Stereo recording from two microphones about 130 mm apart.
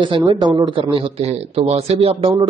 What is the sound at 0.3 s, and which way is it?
A man's voice, 35° right (ahead or behind).